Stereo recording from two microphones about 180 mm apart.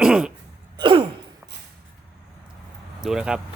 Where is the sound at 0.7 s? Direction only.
25° right (ahead or behind).